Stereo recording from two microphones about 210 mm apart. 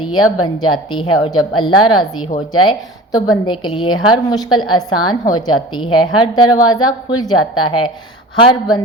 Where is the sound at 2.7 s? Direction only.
20° left (ahead or behind).